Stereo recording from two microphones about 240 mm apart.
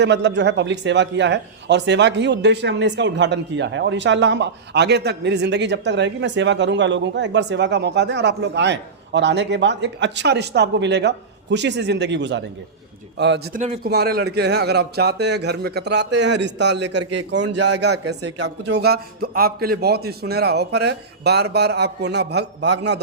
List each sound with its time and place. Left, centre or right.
0.0 s speech: right